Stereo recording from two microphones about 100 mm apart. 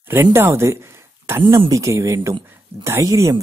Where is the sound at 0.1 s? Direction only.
25° right (ahead or behind).